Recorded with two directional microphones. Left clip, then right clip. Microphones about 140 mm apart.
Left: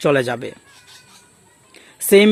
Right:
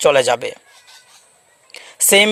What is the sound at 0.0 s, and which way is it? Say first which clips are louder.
Speech: right 4 dB; 45° right (ahead or behind).